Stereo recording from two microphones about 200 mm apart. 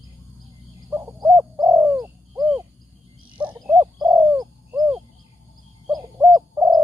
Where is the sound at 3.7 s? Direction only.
15° right (ahead or behind).